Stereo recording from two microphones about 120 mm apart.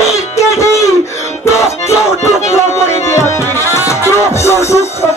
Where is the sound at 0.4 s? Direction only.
25° left (ahead or behind).